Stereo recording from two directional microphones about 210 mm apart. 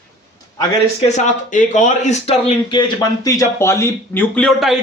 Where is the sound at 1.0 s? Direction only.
35° left (ahead or behind).